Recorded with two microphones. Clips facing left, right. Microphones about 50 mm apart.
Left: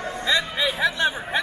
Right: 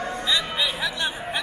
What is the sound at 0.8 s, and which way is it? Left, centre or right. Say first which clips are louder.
Chatter: left 5 dB; left.